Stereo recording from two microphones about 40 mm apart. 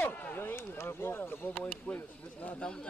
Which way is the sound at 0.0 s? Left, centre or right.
Left.